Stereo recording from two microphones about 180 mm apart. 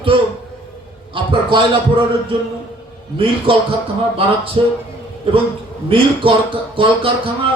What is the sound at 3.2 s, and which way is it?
A man's voice, 30° right (ahead or behind).